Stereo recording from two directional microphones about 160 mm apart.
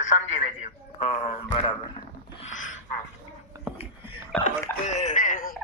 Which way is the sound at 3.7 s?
10° right (ahead or behind).